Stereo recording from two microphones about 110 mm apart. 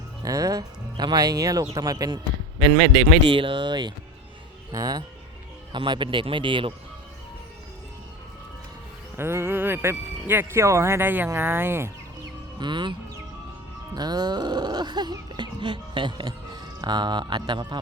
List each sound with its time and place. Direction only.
0.2 s music: 30° right (ahead or behind)
2.0 s speech: 45° right (ahead or behind)
4.7 s music: 35° right (ahead or behind)
5.7 s speech: 45° right (ahead or behind)
9.1 s speech: 25° right (ahead or behind)
12.5 s speech: 45° right (ahead or behind)
13.9 s music: 40° right (ahead or behind)